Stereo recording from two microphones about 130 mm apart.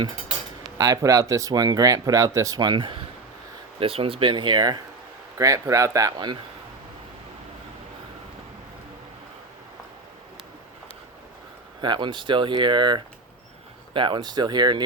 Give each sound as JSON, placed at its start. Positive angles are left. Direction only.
{"t": 0.8, "sound": "speech", "side_deg": -25}
{"t": 11.8, "sound": "speech", "side_deg": -35}